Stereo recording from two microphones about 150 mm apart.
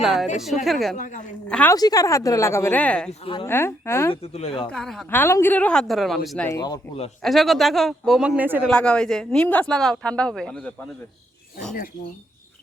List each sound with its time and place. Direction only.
0.0 s speech: 5° right (ahead or behind)
0.9 s a woman's voice: 60° left (ahead or behind)
1.5 s a woman's voice: 5° left (ahead or behind)
1.7 s a woman's voice: 25° left (ahead or behind)
4.1 s speech: 40° left (ahead or behind)
4.7 s speech: 5° left (ahead or behind)
5.1 s a woman's voice: 15° left (ahead or behind)
6.5 s a woman's voice: 25° left (ahead or behind)
7.2 s speech: centre (ahead or behind)
8.7 s speech: 5° left (ahead or behind)